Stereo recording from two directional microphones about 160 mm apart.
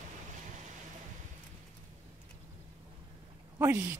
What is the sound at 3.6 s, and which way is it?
Speech, 15° right (ahead or behind).